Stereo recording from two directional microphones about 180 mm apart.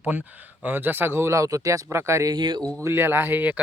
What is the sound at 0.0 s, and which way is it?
Speech, 10° right (ahead or behind).